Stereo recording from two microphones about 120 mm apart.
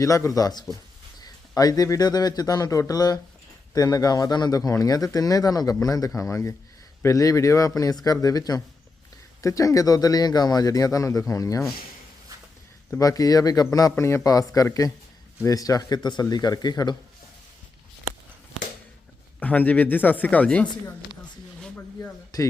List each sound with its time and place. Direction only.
0.0 s a man's voice: 25° left (ahead or behind)
13.0 s a man's voice: 30° left (ahead or behind)
19.4 s speech: 15° left (ahead or behind)
22.3 s speech: 30° left (ahead or behind)